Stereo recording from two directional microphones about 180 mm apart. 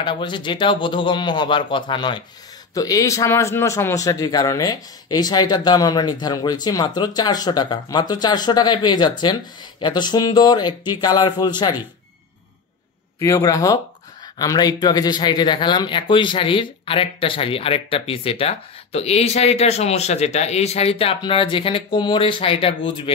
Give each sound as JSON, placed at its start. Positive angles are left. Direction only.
{"t": 0.0, "sound": "a man's voice", "side_deg": 25}
{"t": 13.2, "sound": "a man's voice", "side_deg": 20}